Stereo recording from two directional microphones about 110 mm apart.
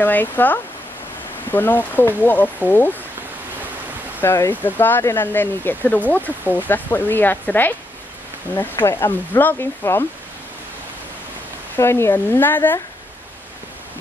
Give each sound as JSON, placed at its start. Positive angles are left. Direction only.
{"t": 0.0, "sound": "speech", "side_deg": 15}
{"t": 4.2, "sound": "speech", "side_deg": 20}
{"t": 11.7, "sound": "speech", "side_deg": 25}